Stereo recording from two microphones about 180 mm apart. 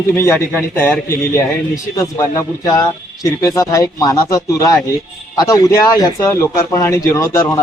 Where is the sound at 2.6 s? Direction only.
20° left (ahead or behind).